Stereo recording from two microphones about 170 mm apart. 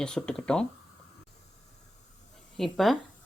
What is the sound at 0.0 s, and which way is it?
Speech, 5° left (ahead or behind).